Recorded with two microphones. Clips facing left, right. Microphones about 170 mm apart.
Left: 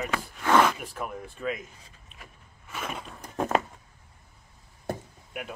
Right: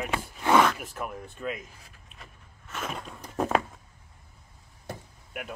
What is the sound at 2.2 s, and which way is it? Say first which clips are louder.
Walk: even; 10° left (ahead or behind).